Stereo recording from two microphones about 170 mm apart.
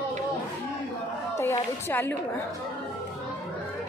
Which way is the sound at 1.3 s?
15° left (ahead or behind).